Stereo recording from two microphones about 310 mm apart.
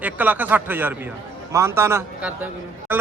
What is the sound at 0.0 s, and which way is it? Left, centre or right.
Speech, centre.